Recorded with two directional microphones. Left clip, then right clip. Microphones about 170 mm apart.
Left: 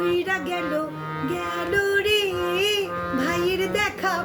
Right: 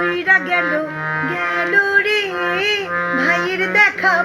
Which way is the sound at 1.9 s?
35° left (ahead or behind).